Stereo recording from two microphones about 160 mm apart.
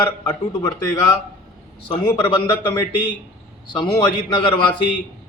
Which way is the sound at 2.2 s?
30° left (ahead or behind).